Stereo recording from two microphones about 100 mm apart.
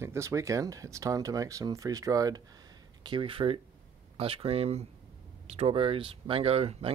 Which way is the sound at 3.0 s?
55° right (ahead or behind).